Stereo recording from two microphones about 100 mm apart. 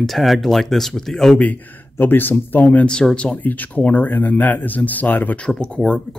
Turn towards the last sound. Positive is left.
turn(degrees=10)  # may be behind; listen again after turning